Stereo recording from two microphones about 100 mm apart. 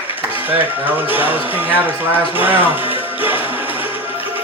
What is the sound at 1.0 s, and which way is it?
Speech, 20° right (ahead or behind).